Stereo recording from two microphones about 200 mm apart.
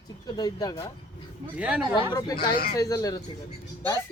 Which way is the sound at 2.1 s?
20° left (ahead or behind).